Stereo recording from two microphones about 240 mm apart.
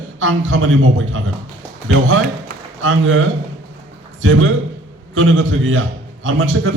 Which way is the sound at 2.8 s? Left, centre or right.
Right.